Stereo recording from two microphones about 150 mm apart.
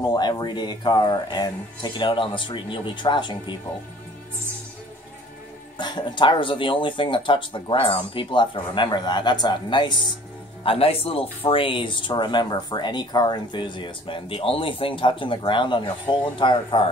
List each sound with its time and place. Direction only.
0.0 s speech: 30° left (ahead or behind)
5.8 s speech: 30° left (ahead or behind)